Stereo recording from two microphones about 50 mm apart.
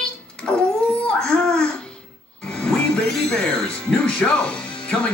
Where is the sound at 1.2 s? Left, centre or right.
Centre.